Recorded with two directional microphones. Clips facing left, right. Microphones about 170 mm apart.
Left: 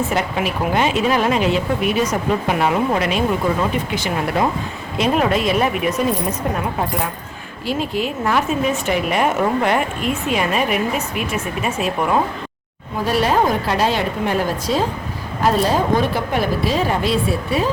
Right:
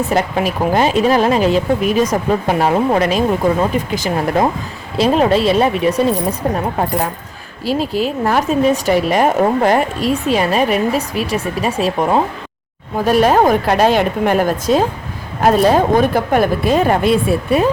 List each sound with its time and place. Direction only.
0.1 s speech: 35° right (ahead or behind)
7.6 s speech: 35° right (ahead or behind)
13.1 s a woman's voice: 45° right (ahead or behind)